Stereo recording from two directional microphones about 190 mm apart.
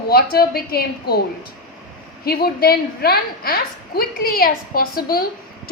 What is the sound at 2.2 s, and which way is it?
A woman's voice, 55° left (ahead or behind).